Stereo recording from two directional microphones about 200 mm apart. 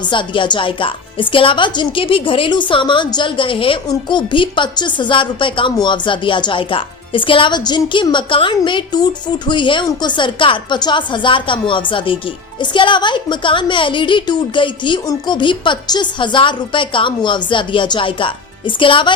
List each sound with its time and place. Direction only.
0.1 s a woman's voice: 25° left (ahead or behind)